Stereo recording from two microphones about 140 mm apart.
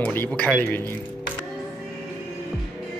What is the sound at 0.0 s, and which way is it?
Speech, 15° left (ahead or behind).